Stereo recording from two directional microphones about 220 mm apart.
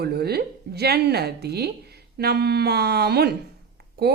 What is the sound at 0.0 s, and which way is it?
Speech, 45° right (ahead or behind).